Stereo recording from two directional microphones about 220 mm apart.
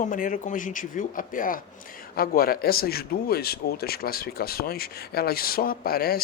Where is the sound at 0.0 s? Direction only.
35° left (ahead or behind).